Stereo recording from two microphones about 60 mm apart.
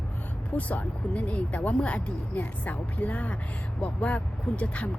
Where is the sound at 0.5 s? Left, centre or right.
Left.